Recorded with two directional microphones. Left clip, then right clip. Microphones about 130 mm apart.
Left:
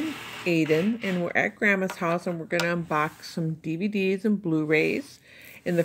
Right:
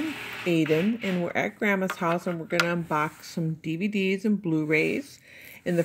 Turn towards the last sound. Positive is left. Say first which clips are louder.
# left 1 dB
turn(degrees=-25)  # may be behind; listen again after turning